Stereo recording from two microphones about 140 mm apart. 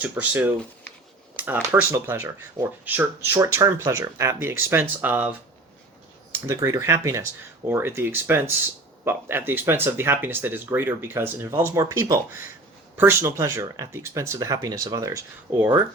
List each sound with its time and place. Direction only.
0.0 s speech: 15° right (ahead or behind)
6.3 s speech: 20° right (ahead or behind)